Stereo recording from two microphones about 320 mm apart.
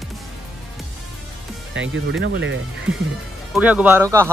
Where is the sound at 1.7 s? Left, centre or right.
Right.